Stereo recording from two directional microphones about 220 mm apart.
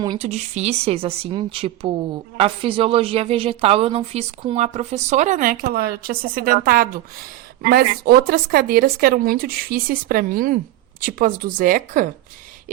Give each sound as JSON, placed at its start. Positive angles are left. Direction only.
{"t": 0.0, "sound": "a woman's voice", "side_deg": -25}